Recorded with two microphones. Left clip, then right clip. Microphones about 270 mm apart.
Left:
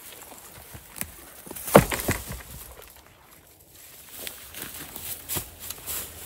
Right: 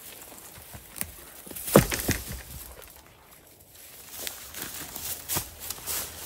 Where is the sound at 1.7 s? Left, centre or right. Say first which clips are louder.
Left 4 dB; left.